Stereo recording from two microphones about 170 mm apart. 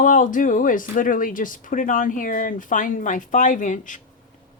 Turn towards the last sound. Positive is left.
turn(degrees=50)  # may be behind; listen again after turning